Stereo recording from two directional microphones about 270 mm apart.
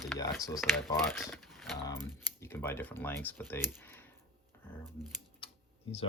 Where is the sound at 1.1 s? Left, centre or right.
Centre.